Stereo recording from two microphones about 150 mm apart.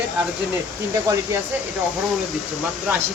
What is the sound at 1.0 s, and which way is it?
Speech, 20° right (ahead or behind).